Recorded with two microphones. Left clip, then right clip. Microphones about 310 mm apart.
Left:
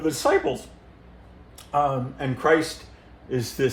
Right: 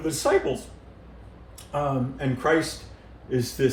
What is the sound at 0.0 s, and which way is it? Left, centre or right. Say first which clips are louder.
Speech: left 2 dB; centre.